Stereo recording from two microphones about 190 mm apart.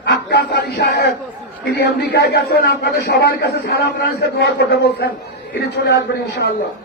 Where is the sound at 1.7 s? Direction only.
60° left (ahead or behind).